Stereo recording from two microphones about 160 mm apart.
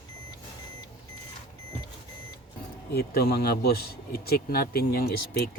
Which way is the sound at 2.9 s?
80° left.